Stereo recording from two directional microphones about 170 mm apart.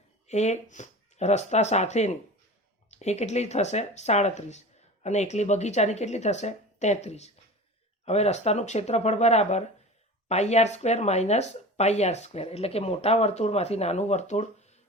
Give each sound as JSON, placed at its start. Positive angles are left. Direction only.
{"t": 0.3, "sound": "speech", "side_deg": 40}